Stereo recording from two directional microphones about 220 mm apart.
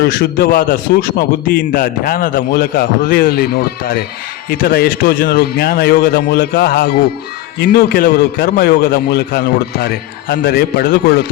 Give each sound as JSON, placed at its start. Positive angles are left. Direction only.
{"t": 0.0, "sound": "a man's voice", "side_deg": 45}